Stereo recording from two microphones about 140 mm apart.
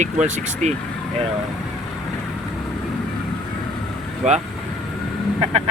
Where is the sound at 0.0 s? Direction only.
60° right (ahead or behind).